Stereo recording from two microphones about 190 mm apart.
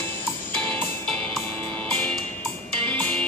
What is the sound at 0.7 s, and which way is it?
Music, 10° left (ahead or behind).